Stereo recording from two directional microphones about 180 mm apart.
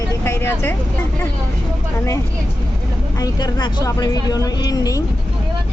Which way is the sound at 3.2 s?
20° left (ahead or behind).